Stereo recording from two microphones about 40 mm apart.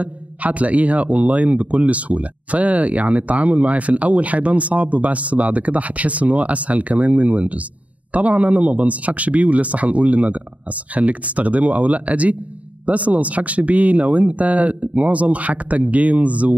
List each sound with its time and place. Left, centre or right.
0.0 s speech: right